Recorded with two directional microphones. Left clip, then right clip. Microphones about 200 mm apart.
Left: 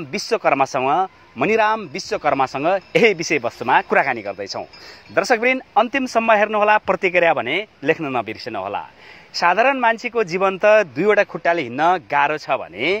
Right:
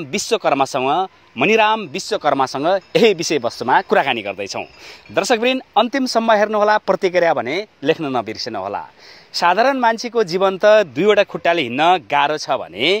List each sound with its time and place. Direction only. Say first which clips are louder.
0.3 s speech: even; 50° right (ahead or behind)
8.0 s speech: right 2 dB; 60° right (ahead or behind)